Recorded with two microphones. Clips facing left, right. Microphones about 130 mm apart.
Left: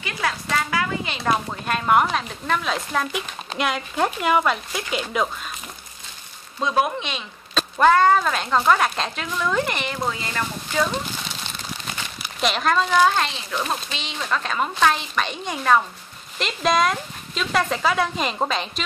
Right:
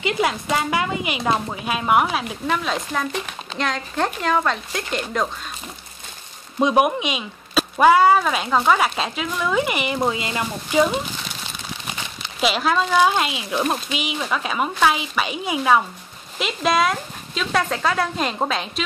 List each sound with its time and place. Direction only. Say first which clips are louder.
0.0 s speech: right 5 dB; 20° right (ahead or behind); by 5.3 s 5° left (ahead or behind)
6.6 s speech: right 4 dB; 15° right (ahead or behind)
12.4 s speech: right 1 dB; 5° right (ahead or behind)